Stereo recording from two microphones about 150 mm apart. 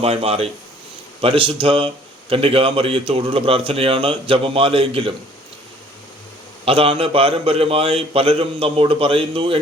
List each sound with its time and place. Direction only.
0.0 s a man's voice: 40° right (ahead or behind)
6.7 s a man's voice: 40° right (ahead or behind)